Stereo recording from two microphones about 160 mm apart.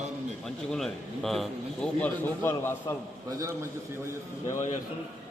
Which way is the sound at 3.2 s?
20° right (ahead or behind).